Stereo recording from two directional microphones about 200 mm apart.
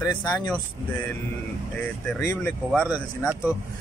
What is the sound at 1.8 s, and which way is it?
Speech, 10° left (ahead or behind).